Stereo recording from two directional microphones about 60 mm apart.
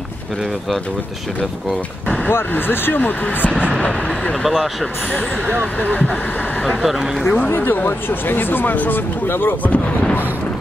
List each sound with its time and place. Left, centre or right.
2.3 s speech: left
3.4 s speech: centre
4.4 s speech: centre
5.8 s speech: left
6.8 s speech: centre
7.5 s speech: left